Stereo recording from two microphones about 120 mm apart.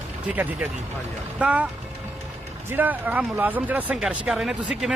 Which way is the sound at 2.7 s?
15° right (ahead or behind).